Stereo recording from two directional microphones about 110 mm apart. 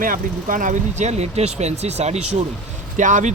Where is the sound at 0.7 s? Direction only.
90° right.